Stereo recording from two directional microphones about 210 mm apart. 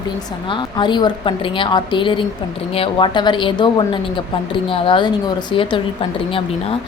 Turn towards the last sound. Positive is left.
turn(degrees=25)  # may be behind; listen again after turning